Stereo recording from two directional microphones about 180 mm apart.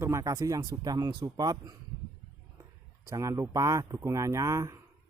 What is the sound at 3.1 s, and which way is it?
Speech, 15° right (ahead or behind).